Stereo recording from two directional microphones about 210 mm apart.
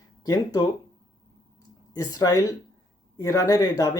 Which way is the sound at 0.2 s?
15° left (ahead or behind).